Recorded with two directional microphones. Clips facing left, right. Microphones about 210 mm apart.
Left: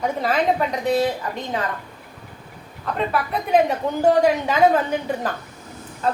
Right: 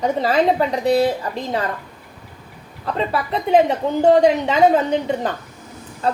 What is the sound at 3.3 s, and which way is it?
A woman's voice, 25° right (ahead or behind).